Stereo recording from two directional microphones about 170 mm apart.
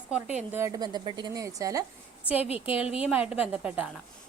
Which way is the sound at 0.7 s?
25° right (ahead or behind).